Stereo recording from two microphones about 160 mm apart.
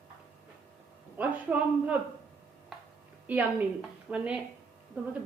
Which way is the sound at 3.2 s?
10° right (ahead or behind).